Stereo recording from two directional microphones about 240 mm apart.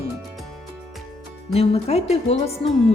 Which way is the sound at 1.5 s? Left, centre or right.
Left.